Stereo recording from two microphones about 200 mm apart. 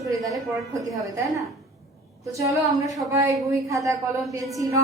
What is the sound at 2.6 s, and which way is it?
A woman's voice, 15° right (ahead or behind).